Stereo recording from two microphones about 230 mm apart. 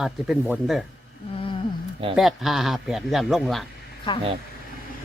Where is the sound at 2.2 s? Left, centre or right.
Centre.